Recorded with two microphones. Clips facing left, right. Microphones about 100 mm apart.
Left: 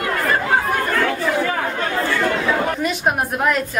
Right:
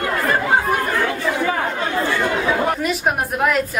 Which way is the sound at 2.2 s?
5° right (ahead or behind).